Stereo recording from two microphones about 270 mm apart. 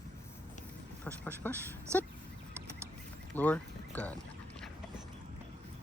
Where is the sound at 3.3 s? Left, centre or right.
Centre.